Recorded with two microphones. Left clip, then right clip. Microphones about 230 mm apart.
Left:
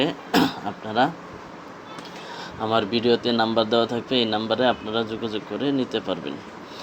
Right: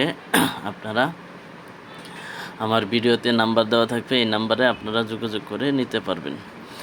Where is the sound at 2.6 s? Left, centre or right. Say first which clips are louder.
Right 1 dB; right.